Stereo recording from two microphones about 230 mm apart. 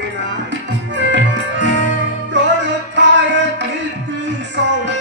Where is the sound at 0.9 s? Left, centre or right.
Right.